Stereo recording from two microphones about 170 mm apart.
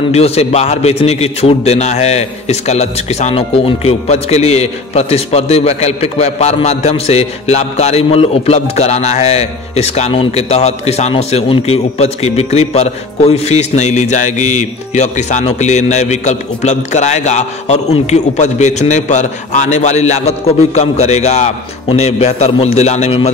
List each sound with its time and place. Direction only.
0.1 s a man's voice: 40° left (ahead or behind)